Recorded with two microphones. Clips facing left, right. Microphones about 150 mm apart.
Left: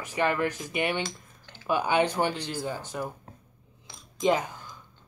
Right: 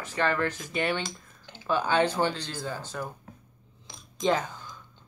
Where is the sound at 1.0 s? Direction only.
20° right (ahead or behind).